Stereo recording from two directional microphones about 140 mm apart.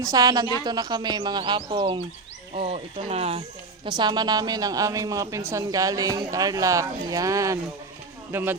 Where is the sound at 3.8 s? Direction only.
30° right (ahead or behind); by 8.5 s 15° right (ahead or behind).